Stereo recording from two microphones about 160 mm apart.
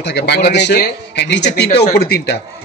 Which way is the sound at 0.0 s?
90° left.